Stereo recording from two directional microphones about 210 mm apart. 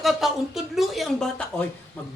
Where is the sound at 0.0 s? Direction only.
Centre (ahead or behind).